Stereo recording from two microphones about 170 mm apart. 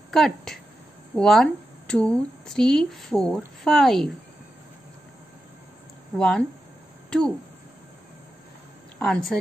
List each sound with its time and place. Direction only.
0.1 s speech: centre (ahead or behind)
6.1 s speech: 5° left (ahead or behind)
9.0 s speech: centre (ahead or behind)